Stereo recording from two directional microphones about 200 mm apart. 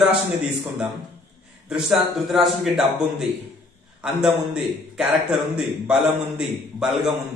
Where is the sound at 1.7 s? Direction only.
Centre (ahead or behind).